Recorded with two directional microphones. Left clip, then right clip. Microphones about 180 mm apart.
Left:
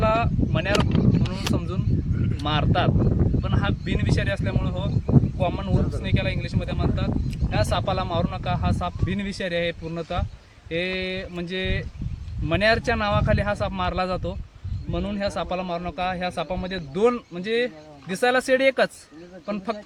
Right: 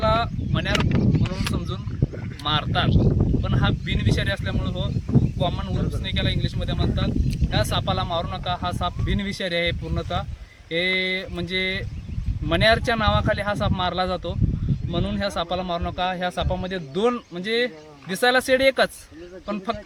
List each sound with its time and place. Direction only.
0.0 s speech: 10° left (ahead or behind)
0.7 s speech: 25° right (ahead or behind)
2.4 s speech: 5° left (ahead or behind)